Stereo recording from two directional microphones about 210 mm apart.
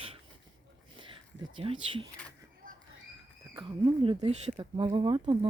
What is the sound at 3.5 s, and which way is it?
Speech, 20° right (ahead or behind).